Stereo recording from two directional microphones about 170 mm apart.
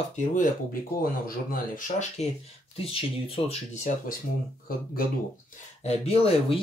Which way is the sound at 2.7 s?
35° left (ahead or behind).